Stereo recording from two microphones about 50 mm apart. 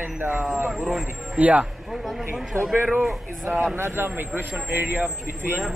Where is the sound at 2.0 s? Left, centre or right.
Centre.